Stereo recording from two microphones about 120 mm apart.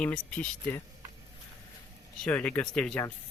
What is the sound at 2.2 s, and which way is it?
Speech, 10° left (ahead or behind).